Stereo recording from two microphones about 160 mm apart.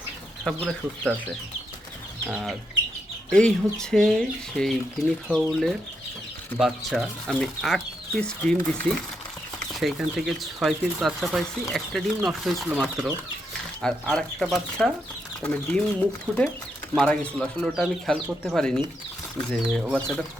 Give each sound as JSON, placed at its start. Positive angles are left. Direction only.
{"t": 0.4, "sound": "speech", "side_deg": 0}
{"t": 2.2, "sound": "speech", "side_deg": 0}
{"t": 13.8, "sound": "speech", "side_deg": 5}